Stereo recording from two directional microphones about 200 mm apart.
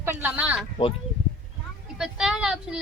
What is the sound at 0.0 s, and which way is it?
Speech, 10° right (ahead or behind).